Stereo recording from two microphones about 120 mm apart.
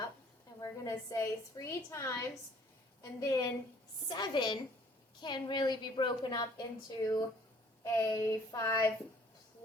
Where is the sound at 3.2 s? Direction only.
30° left (ahead or behind).